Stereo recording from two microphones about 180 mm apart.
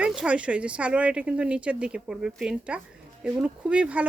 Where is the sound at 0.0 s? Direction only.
5° right (ahead or behind).